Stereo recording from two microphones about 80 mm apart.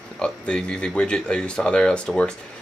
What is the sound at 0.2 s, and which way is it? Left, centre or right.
Speech, centre.